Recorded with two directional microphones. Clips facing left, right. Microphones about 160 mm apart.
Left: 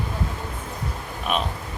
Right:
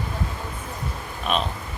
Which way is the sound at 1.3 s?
10° left (ahead or behind).